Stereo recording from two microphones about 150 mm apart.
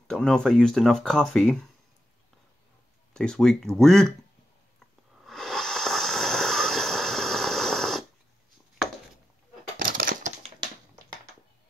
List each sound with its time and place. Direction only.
0.1 s speech: 5° left (ahead or behind)
3.1 s speech: 5° left (ahead or behind)
5.2 s a sound: centre (ahead or behind)
9.8 s typewriter: 65° right (ahead or behind)